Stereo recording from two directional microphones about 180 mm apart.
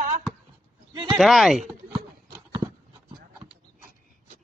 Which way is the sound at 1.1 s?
Centre (ahead or behind).